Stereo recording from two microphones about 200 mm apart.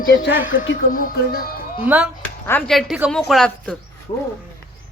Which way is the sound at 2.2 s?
10° left (ahead or behind).